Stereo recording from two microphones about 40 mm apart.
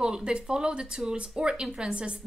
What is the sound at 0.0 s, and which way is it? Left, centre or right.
A woman's voice, right.